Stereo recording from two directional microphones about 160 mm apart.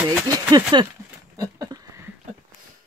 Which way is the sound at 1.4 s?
20° right (ahead or behind).